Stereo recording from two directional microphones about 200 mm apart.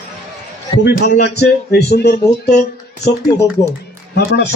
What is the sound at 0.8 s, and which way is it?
Speech, 55° left (ahead or behind).